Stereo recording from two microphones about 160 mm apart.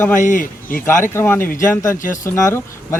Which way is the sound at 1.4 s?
60° left (ahead or behind).